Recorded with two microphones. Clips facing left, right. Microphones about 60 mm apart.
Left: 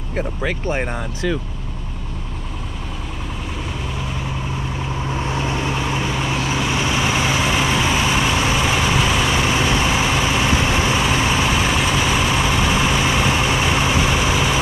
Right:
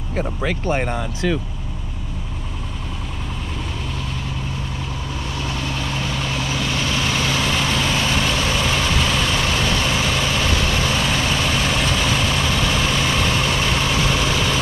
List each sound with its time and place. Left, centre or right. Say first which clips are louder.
0.1 s speech: even; left
5.0 s vehicle: left 6 dB; left